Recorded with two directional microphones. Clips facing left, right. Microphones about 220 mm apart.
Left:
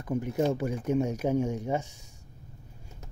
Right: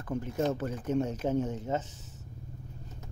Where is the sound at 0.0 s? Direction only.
15° left (ahead or behind).